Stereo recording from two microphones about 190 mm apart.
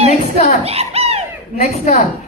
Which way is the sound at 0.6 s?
35° right (ahead or behind).